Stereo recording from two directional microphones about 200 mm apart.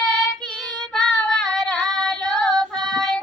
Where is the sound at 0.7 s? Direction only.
Centre (ahead or behind).